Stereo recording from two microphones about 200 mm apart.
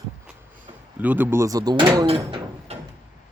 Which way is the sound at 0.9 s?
10° right (ahead or behind).